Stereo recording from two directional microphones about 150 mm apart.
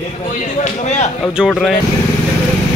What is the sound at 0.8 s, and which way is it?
Speech, 50° left (ahead or behind).